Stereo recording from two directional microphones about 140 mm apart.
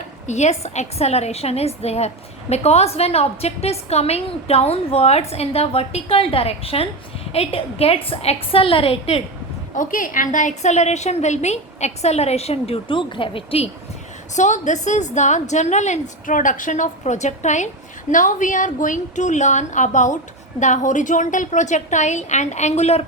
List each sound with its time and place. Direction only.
0.3 s a woman's voice: 55° left (ahead or behind)
9.7 s a woman's voice: 70° left (ahead or behind); by 13.7 s 40° left (ahead or behind)
14.3 s a woman's voice: 60° left (ahead or behind)